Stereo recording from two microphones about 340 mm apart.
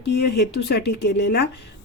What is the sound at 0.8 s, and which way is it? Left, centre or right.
Speech, left.